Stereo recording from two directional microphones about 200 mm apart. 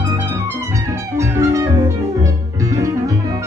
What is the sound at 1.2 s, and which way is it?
Music, 15° right (ahead or behind).